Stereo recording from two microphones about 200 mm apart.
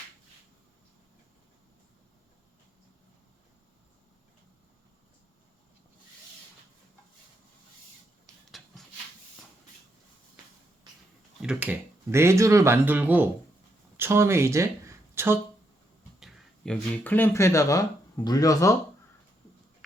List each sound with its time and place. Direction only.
11.4 s speech: 5° right (ahead or behind)
16.2 s speech: 5° left (ahead or behind)